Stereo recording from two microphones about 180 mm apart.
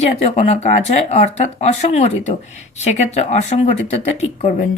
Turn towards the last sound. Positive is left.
turn(degrees=35)  # may be behind; listen again after turning